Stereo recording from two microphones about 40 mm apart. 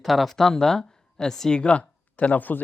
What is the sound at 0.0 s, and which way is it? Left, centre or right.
Speech, centre.